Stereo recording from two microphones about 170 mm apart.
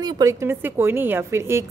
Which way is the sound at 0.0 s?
20° right (ahead or behind).